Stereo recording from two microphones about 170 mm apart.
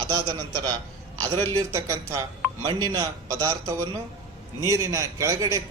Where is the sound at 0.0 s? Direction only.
25° right (ahead or behind).